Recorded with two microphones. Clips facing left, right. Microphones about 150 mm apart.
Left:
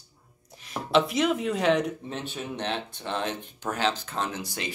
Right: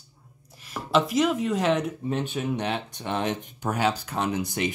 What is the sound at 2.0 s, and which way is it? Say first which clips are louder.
Speech: right 7 dB; 15° right (ahead or behind).